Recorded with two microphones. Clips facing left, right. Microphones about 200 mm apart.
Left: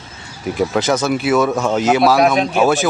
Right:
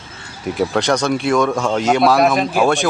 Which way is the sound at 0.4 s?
Centre (ahead or behind).